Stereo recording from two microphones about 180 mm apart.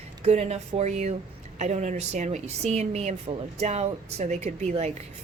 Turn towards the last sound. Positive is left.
turn(degrees=-40)  # may be behind; listen again after turning